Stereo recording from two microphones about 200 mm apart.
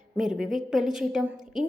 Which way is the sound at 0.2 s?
Centre (ahead or behind).